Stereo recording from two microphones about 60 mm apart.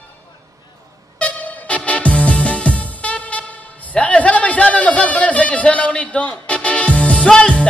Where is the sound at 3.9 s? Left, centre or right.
Centre.